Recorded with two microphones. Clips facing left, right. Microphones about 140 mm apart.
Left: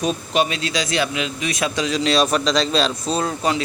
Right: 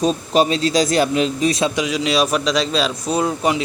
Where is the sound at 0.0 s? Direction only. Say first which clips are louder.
Right 4 dB; 35° right (ahead or behind).